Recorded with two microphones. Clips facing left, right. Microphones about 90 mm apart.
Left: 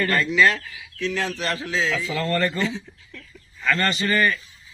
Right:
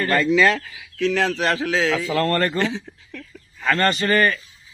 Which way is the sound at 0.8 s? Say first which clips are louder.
Right 6 dB; 90° right.